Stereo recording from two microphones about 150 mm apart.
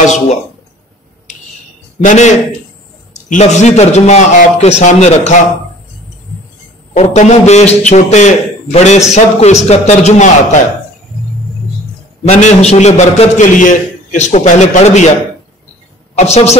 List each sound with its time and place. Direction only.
2.0 s a man's voice: 55° left (ahead or behind)
6.9 s a man's voice: 50° left (ahead or behind)
12.3 s a man's voice: 50° left (ahead or behind)
16.2 s a man's voice: 45° left (ahead or behind)